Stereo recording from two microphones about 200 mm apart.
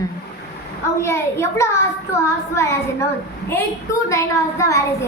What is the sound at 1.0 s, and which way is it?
A woman's voice, 15° left (ahead or behind).